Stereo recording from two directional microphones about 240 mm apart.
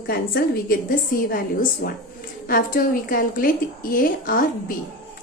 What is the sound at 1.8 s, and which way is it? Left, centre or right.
A woman's voice, left.